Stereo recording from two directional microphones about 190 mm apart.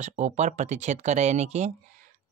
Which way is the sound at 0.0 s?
40° right (ahead or behind).